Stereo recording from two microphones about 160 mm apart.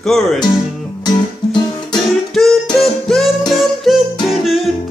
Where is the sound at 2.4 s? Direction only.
Centre (ahead or behind).